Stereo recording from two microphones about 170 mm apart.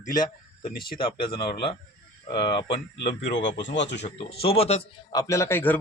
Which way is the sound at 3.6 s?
90° left.